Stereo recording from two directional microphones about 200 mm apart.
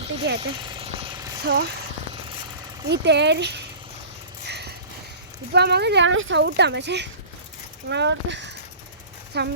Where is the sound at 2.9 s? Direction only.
60° right (ahead or behind).